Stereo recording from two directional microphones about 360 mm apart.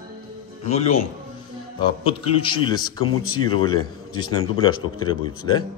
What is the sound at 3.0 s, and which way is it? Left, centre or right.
Speech, left.